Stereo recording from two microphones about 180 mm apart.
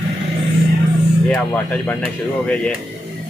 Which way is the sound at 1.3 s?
10° left (ahead or behind).